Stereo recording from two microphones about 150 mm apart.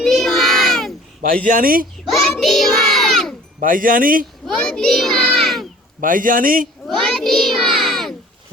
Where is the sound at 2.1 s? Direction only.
Centre (ahead or behind).